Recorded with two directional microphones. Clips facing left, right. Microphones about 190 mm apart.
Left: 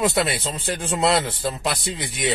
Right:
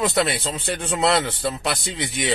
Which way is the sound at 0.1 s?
Centre (ahead or behind).